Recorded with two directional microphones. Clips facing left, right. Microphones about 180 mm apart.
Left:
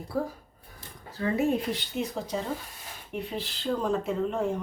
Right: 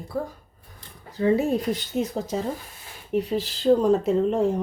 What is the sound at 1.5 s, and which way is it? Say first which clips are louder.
Speech: right 4 dB; 40° right (ahead or behind).